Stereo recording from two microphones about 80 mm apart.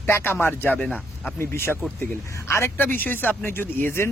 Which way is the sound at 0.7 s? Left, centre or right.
Centre.